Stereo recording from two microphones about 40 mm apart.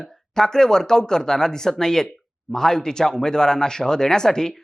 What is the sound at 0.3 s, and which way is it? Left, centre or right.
Speech, centre.